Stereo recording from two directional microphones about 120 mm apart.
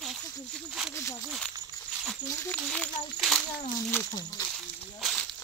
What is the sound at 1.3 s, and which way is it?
Speech, centre (ahead or behind).